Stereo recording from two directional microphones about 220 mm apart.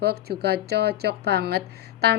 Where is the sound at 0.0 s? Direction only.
45° right (ahead or behind).